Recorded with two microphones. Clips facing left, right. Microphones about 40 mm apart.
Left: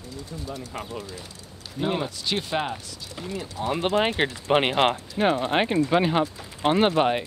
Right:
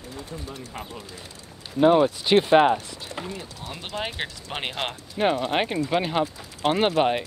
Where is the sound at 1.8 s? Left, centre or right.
Right.